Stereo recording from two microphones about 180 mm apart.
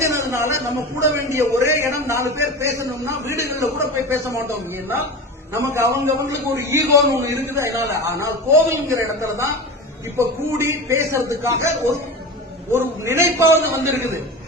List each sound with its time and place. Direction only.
0.0 s a man's voice: 15° right (ahead or behind)
12.7 s a man's voice: 15° right (ahead or behind)